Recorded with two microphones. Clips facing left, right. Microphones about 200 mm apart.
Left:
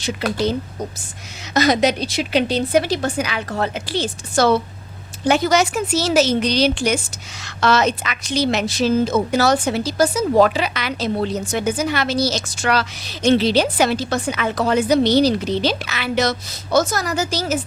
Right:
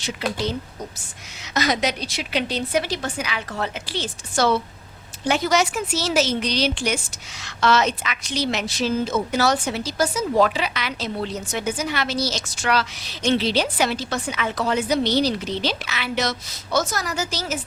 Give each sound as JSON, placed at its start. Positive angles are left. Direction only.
{"t": 1.5, "sound": "a woman's voice", "side_deg": 35}